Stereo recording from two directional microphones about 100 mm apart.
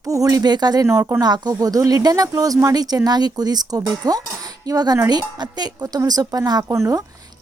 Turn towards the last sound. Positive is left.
turn(degrees=-30)  # may be behind; listen again after turning